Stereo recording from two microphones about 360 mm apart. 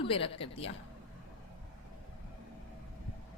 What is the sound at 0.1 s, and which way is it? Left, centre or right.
Speech, centre.